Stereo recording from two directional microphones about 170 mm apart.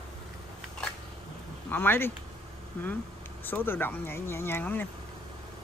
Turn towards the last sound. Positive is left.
turn(degrees=10)  # may be behind; listen again after turning